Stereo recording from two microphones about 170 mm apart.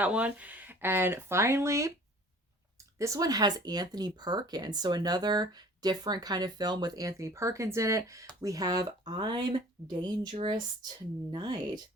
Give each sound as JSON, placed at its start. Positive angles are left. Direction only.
{"t": 0.0, "sound": "speech", "side_deg": -10}